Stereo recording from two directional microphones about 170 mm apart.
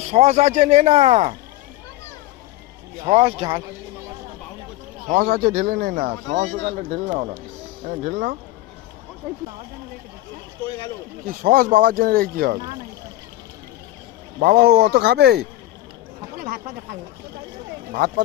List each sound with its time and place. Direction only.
0.1 s speech: 40° right (ahead or behind)
3.1 s speech: 35° right (ahead or behind)
5.0 s speech: 55° right (ahead or behind)
11.3 s speech: 55° right (ahead or behind)
14.3 s speech: 65° right (ahead or behind)
16.4 s speech: 55° right (ahead or behind)